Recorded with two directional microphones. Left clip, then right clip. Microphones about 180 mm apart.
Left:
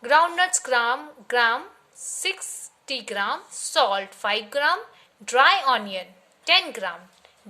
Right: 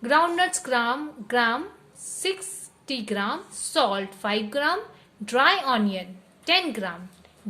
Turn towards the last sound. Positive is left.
turn(degrees=20)  # may be behind; listen again after turning